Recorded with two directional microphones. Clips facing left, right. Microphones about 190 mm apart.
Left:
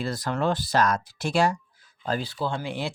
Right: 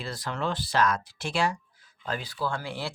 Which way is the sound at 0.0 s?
45° left (ahead or behind).